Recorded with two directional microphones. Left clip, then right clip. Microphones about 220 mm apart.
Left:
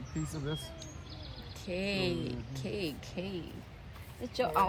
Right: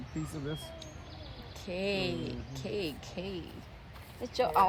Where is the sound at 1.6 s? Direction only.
20° right (ahead or behind).